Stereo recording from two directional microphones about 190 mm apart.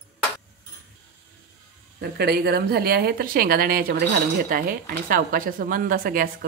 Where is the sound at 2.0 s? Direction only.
55° right (ahead or behind).